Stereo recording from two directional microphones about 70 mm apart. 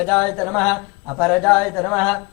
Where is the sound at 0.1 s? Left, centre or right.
Centre.